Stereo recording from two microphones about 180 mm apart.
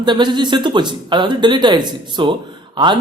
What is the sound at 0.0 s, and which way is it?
Speech, 25° right (ahead or behind).